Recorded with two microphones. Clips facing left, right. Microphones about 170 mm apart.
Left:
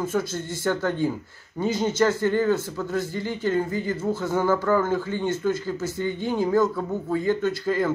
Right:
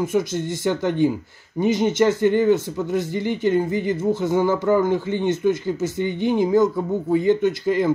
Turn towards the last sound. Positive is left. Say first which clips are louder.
# right 4 dB
turn(degrees=-20)  # may be behind; listen again after turning